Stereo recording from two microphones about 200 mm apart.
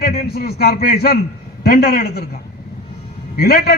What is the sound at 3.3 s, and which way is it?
Speech, 50° left (ahead or behind).